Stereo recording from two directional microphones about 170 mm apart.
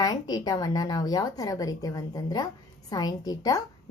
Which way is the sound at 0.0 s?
20° left (ahead or behind).